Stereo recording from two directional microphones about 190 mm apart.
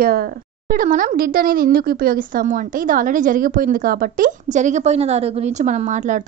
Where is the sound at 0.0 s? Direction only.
50° right (ahead or behind).